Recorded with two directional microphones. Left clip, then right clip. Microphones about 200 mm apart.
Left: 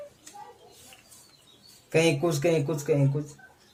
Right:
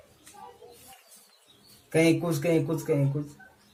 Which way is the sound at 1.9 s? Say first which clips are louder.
Even; 40° left (ahead or behind).